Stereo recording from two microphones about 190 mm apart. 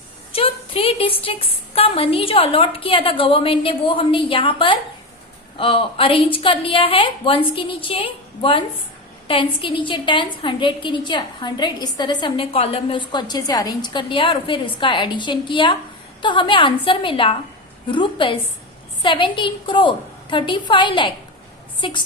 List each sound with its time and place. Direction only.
0.3 s a woman's voice: 30° left (ahead or behind)